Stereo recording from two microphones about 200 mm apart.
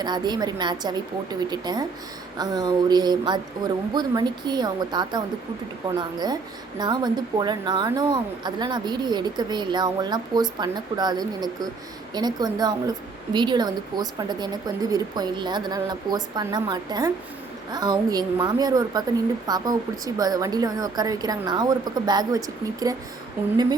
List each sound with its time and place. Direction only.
0.0 s speech: 20° right (ahead or behind)